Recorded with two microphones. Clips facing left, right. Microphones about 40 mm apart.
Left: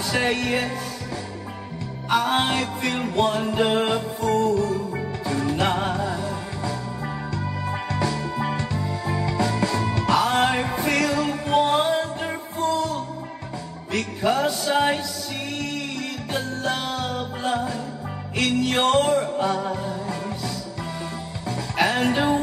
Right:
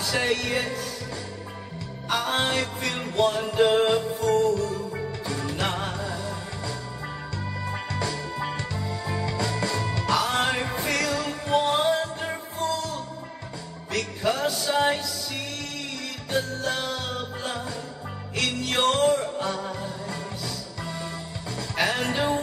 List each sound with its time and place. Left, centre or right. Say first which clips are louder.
0.0 s music: left 2 dB; left
2.0 s music: left 4 dB; centre
7.9 s music: left 6 dB; centre
12.6 s music: left 5 dB; left
13.9 s music: left 4 dB; centre
16.3 s music: even; centre
18.9 s music: left 1 dB; centre
21.5 s music: left 4 dB; centre